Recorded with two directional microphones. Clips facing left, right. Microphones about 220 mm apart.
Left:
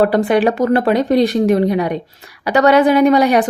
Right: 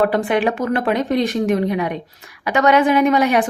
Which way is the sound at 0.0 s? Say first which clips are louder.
Left 4 dB; 35° left (ahead or behind).